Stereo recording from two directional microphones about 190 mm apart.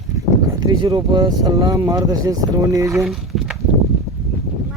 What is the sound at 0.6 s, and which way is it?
Speech, 20° right (ahead or behind).